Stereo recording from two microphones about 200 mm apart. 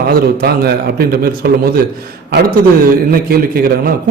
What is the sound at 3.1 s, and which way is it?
Speech, 50° right (ahead or behind).